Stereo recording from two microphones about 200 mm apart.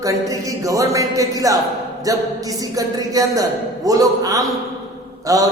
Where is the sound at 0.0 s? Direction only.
15° right (ahead or behind).